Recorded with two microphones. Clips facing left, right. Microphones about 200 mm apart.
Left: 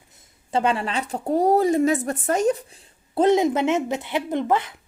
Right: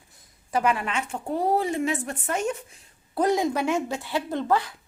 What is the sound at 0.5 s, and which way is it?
Speech, 30° left (ahead or behind).